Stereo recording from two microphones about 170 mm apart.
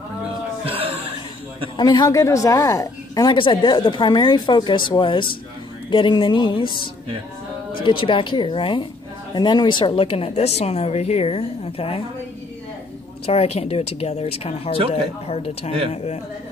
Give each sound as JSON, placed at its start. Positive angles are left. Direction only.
{"t": 0.7, "sound": "gasp", "side_deg": -35}
{"t": 1.8, "sound": "a woman's voice", "side_deg": 25}
{"t": 13.2, "sound": "speech", "side_deg": 35}